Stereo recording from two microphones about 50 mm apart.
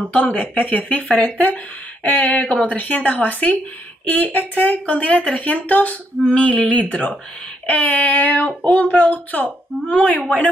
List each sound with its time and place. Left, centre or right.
0.1 s speech: left
6.2 s speech: left